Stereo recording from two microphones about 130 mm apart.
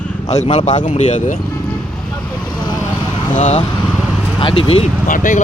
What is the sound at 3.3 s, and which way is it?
Speech, 75° left (ahead or behind).